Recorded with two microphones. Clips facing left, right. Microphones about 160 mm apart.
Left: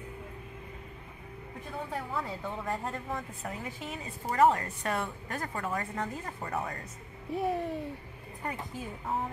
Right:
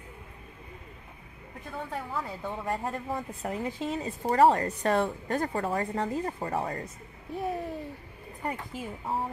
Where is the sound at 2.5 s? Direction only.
15° right (ahead or behind).